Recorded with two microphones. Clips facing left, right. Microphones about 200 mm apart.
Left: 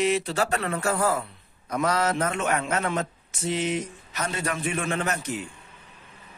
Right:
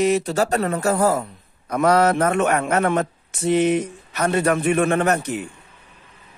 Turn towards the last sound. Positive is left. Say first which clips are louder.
# right 8 dB
turn(degrees=-60)  # may be behind; listen again after turning